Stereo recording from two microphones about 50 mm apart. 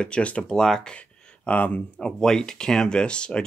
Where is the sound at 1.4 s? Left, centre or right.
Left.